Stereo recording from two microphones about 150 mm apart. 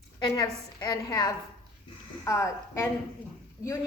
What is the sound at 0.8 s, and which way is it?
A woman's voice, 25° left (ahead or behind).